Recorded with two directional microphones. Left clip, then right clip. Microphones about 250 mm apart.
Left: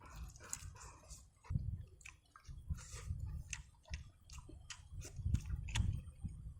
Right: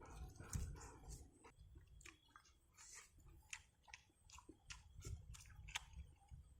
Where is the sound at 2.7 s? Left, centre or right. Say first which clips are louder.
Left 6 dB; centre.